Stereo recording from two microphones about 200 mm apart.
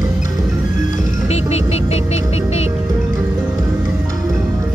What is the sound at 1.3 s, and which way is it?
Music, 30° left (ahead or behind).